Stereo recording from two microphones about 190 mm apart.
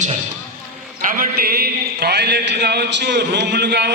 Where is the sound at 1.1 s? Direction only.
50° right (ahead or behind).